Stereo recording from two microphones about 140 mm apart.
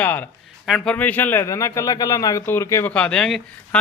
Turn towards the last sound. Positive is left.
turn(degrees=5)  # may be behind; listen again after turning